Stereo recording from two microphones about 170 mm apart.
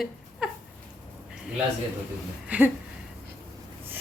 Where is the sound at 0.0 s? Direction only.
5° right (ahead or behind).